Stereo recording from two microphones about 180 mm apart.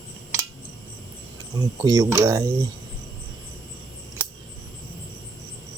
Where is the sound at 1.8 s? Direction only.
20° right (ahead or behind).